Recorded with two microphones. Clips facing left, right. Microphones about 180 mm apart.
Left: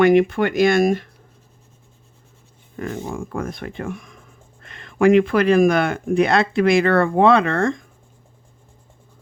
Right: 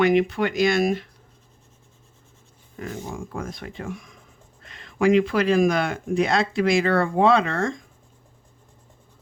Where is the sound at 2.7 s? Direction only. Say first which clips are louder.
Left 5 dB; 55° left (ahead or behind).